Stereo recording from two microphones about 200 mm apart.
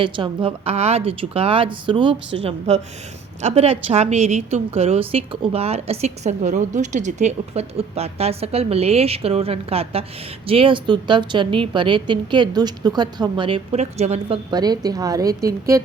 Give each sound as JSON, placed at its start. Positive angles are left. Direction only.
{"t": 0.0, "sound": "a woman's voice", "side_deg": -25}
{"t": 14.5, "sound": "a woman's voice", "side_deg": -20}